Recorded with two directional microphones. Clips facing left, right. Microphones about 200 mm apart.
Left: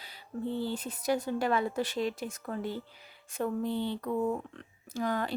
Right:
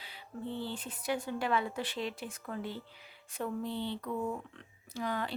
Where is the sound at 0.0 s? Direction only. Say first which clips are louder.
Left 5 dB; 40° left (ahead or behind).